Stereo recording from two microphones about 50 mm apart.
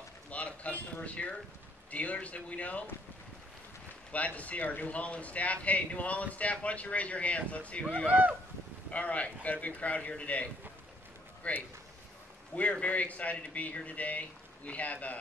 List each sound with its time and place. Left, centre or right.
0.3 s speech: left
4.1 s speech: left
8.1 s speech: right
8.9 s speech: left
12.8 s speech: left